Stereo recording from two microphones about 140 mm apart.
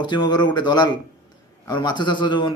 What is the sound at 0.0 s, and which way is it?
Speech, 30° left (ahead or behind).